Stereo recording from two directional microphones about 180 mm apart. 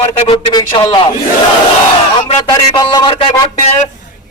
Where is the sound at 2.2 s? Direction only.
25° left (ahead or behind).